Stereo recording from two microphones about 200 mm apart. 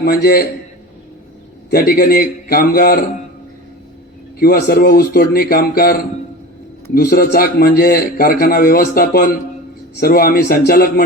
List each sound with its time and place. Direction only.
0.0 s a man's voice: 50° left (ahead or behind)
1.7 s a man's voice: 50° left (ahead or behind)
4.4 s a man's voice: 50° left (ahead or behind)